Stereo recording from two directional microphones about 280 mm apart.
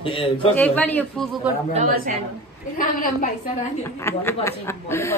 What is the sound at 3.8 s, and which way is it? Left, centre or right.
Speech, centre.